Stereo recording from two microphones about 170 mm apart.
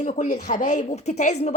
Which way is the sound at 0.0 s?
45° left (ahead or behind).